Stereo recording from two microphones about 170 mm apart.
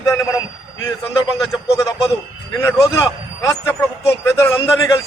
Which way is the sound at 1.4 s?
20° left (ahead or behind).